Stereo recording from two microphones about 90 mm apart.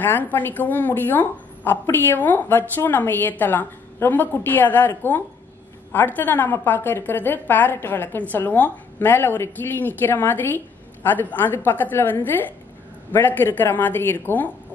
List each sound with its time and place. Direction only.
0.0 s a woman's voice: 20° left (ahead or behind)